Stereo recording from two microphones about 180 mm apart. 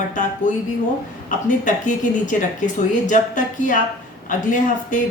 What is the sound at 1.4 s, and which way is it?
A woman's voice, 45° left (ahead or behind).